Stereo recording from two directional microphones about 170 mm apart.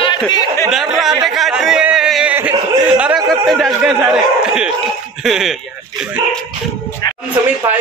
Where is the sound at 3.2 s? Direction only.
Centre (ahead or behind).